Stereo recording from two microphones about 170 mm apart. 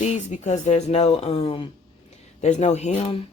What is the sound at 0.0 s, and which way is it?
Speech, 45° left (ahead or behind).